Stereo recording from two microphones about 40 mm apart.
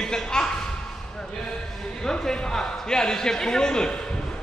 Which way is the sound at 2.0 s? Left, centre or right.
Centre.